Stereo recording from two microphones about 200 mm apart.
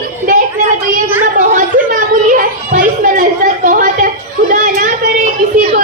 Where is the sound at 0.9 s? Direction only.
40° right (ahead or behind).